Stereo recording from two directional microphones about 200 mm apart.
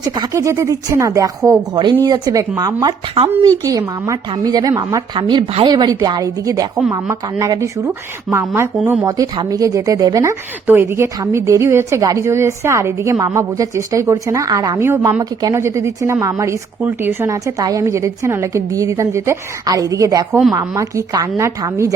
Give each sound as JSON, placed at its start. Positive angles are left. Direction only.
{"t": 0.0, "sound": "a woman's voice", "side_deg": -20}